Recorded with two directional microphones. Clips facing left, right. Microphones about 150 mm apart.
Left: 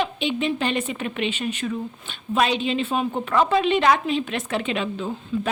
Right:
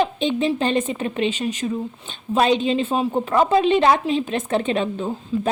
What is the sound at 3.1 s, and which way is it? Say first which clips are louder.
A woman's voice: right 3 dB; 20° right (ahead or behind).